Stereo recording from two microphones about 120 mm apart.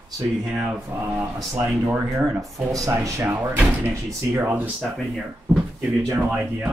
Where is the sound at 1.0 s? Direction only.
15° right (ahead or behind).